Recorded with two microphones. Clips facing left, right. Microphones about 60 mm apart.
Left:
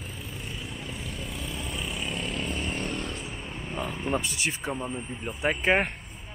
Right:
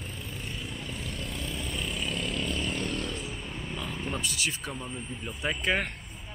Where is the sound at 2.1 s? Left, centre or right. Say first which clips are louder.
Even; left.